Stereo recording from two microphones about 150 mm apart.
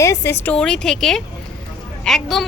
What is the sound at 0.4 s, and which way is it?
Speech, 5° left (ahead or behind).